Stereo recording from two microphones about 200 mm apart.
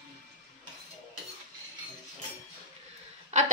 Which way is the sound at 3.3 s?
35° right (ahead or behind).